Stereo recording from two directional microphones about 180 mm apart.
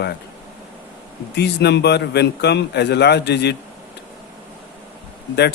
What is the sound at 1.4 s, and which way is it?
A man's voice, 70° left (ahead or behind).